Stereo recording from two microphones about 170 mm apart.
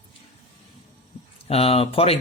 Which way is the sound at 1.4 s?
35° left (ahead or behind).